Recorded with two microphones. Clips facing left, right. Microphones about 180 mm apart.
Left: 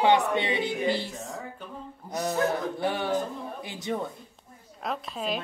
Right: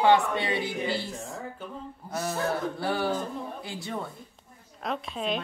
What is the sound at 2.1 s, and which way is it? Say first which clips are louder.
A woman's voice: left 3 dB; 15° left (ahead or behind).